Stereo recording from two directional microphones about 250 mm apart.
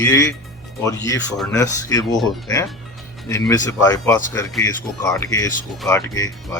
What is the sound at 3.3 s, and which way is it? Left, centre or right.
Speech, centre.